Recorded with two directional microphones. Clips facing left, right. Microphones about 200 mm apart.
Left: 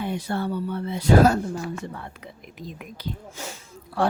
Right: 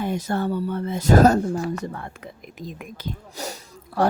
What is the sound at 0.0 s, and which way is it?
Speech, 45° right (ahead or behind).